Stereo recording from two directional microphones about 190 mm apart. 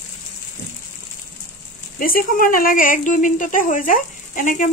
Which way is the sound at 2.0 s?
50° left (ahead or behind).